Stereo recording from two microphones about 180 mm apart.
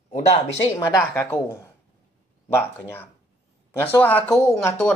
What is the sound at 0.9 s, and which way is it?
Speech, 15° left (ahead or behind).